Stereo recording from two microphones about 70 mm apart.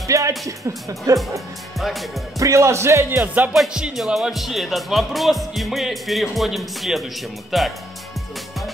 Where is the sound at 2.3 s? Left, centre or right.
Right.